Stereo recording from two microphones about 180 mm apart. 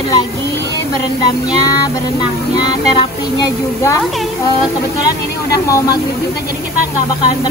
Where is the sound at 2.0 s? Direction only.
20° left (ahead or behind).